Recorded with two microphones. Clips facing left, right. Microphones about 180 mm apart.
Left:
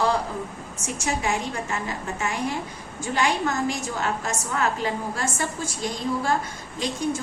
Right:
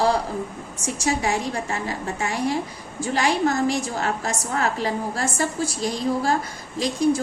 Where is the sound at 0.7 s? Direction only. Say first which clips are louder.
Right 4 dB; 35° right (ahead or behind).